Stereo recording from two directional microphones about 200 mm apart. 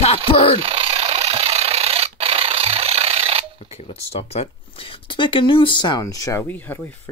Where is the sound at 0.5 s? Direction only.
30° right (ahead or behind).